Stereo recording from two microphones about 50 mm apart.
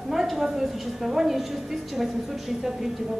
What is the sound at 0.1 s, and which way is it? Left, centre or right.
A woman's voice, centre.